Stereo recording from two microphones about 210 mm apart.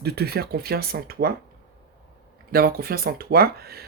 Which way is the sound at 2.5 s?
45° right (ahead or behind).